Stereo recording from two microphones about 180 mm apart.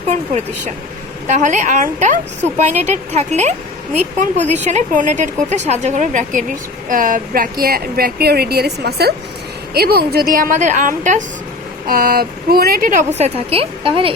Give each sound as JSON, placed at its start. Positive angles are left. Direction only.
{"t": 1.3, "sound": "a woman's voice", "side_deg": -40}